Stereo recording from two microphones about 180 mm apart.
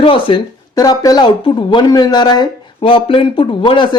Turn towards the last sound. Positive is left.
turn(degrees=25)  # may be behind; listen again after turning